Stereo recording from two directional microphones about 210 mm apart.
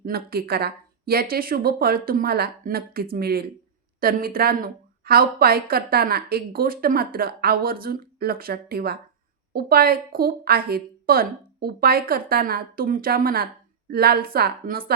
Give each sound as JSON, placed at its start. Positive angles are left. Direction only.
{"t": 0.0, "sound": "a woman's voice", "side_deg": -45}